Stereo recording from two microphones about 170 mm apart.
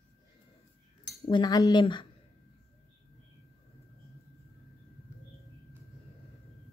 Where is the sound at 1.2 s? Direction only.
25° left (ahead or behind).